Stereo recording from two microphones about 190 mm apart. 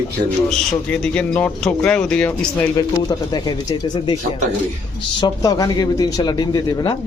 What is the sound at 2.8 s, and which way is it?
A man's voice, 20° left (ahead or behind).